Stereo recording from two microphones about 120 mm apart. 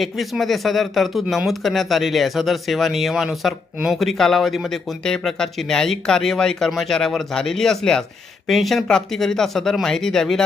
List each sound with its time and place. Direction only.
0.0 s speech: centre (ahead or behind)